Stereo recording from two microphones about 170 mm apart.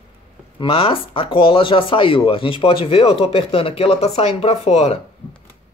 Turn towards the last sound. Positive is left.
turn(degrees=35)  # may be behind; listen again after turning